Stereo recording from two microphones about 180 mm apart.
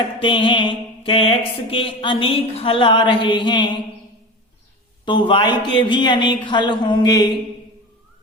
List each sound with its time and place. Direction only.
0.2 s mantra: 30° left (ahead or behind)
5.0 s mantra: 25° left (ahead or behind)